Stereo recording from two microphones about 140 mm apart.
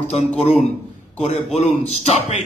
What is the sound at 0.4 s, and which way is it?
Speech, 50° left (ahead or behind).